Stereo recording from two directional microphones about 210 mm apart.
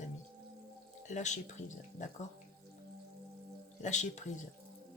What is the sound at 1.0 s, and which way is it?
Speech, 35° left (ahead or behind).